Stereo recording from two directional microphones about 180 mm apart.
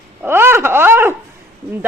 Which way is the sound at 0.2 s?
10° right (ahead or behind).